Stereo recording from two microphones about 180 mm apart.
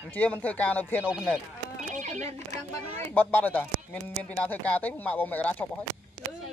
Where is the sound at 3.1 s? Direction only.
10° left (ahead or behind).